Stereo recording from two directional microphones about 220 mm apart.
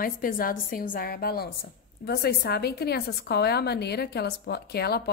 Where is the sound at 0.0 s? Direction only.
40° left (ahead or behind).